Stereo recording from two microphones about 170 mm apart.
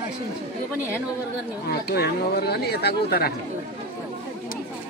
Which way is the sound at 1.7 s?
70° left (ahead or behind).